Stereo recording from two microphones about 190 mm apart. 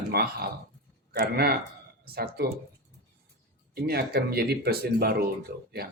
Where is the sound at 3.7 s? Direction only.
55° right (ahead or behind).